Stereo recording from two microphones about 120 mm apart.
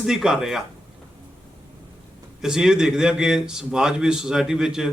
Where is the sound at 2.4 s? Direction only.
5° right (ahead or behind).